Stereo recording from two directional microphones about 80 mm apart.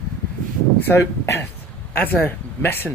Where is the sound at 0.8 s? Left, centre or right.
Left.